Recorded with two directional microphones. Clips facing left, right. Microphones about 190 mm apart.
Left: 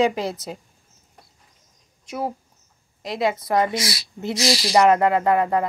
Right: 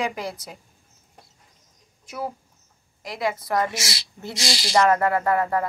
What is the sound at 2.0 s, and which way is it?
Speech, 20° left (ahead or behind).